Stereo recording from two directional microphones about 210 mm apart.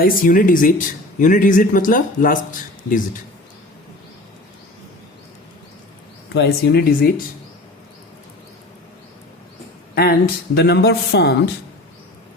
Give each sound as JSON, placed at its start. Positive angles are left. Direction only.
{"t": 0.0, "sound": "speech", "side_deg": 40}
{"t": 6.3, "sound": "speech", "side_deg": 50}
{"t": 9.9, "sound": "speech", "side_deg": 45}